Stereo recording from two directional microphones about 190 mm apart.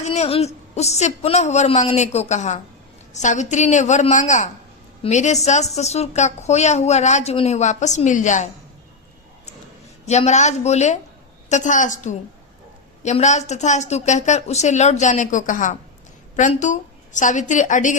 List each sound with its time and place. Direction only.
0.0 s a woman's voice: 35° left (ahead or behind)
10.1 s a woman's voice: 35° left (ahead or behind)